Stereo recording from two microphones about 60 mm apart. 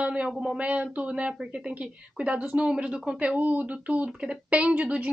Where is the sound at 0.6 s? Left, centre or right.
Right.